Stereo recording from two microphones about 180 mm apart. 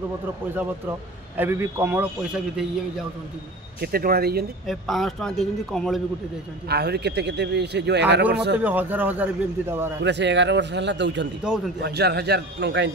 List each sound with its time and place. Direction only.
1.3 s a man's voice: 10° right (ahead or behind)
3.8 s speech: 55° right (ahead or behind)
4.6 s a man's voice: centre (ahead or behind)
6.7 s speech: 65° right (ahead or behind)
8.6 s a man's voice: 10° right (ahead or behind)
10.0 s speech: 75° right (ahead or behind)
11.4 s a man's voice: centre (ahead or behind)
11.8 s speech: 65° right (ahead or behind)